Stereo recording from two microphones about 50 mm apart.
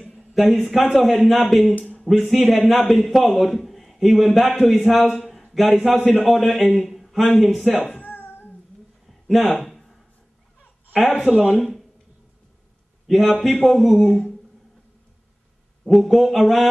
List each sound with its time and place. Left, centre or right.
0.1 s a sound: centre
0.9 s speech: centre
2.0 s a sound: centre
2.3 s a man's voice: centre
8.0 s cat: left
9.3 s a sound: centre
11.5 s speech: centre
13.0 s speech: centre
15.8 s speech: centre